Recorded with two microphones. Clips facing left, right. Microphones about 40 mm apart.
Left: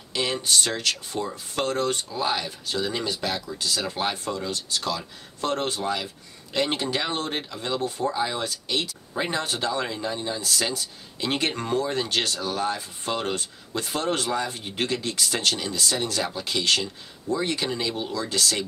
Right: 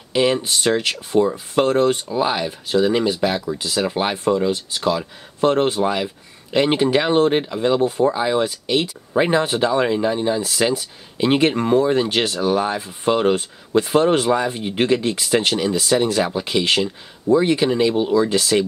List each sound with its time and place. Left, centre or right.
0.1 s speech: right